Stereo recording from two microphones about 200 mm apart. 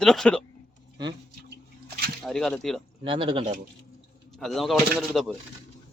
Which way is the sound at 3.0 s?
25° right (ahead or behind).